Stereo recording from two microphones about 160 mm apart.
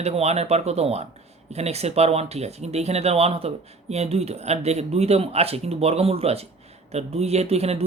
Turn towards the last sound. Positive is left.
turn(degrees=-40)  # may be behind; listen again after turning